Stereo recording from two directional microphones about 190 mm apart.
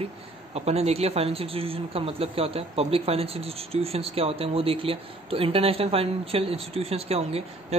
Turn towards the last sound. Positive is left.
turn(degrees=-30)  # may be behind; listen again after turning